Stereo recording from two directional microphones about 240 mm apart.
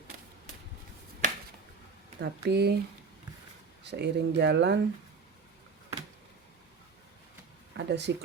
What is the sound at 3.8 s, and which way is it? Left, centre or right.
Speech, right.